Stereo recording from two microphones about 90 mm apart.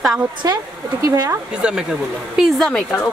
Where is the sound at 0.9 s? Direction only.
40° right (ahead or behind).